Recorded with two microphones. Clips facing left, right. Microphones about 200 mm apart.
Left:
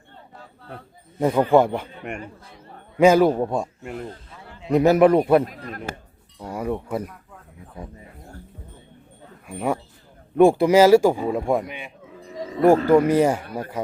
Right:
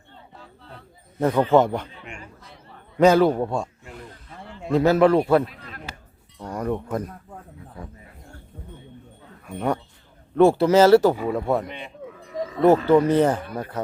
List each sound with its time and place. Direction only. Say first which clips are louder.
1.2 s speech: left 1 dB; 10° left (ahead or behind)
2.0 s a man's voice: left 8 dB; 55° left (ahead or behind)
3.0 s speech: left 1 dB; 10° left (ahead or behind)
3.8 s speech: left 9 dB; 55° left (ahead or behind)
4.7 s speech: left 2 dB; 20° left (ahead or behind)
5.5 s a sound: left 7 dB; 45° left (ahead or behind)
6.4 s chink: even; 10° left (ahead or behind)
9.5 s speech: even; 5° left (ahead or behind)